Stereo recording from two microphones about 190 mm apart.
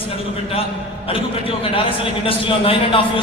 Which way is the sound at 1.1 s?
30° left (ahead or behind).